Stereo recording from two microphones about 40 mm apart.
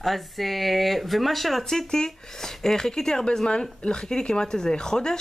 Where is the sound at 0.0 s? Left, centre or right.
Centre.